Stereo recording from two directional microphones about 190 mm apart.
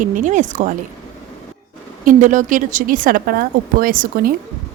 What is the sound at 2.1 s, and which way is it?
A woman's voice, 40° right (ahead or behind).